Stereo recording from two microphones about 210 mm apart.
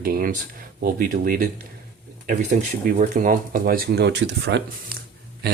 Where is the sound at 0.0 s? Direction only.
40° right (ahead or behind).